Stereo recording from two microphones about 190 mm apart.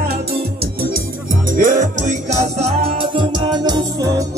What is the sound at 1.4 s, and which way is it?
Music, 45° right (ahead or behind).